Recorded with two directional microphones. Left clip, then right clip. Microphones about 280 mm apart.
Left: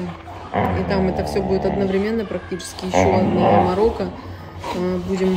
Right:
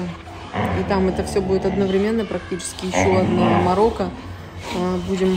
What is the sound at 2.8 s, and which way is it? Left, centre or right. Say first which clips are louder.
Speech: left 4 dB; left.